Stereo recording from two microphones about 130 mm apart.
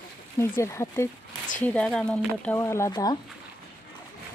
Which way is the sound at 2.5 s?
20° left (ahead or behind).